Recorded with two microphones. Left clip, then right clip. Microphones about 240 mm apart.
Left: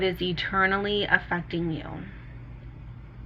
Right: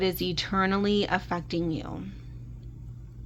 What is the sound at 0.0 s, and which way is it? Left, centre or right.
Speech, right.